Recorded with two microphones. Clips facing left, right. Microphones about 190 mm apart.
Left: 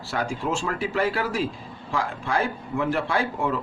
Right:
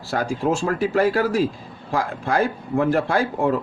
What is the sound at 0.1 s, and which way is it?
A man's voice, 40° right (ahead or behind).